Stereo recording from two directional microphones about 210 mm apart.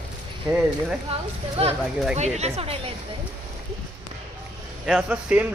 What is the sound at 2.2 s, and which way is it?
Speech, 30° right (ahead or behind).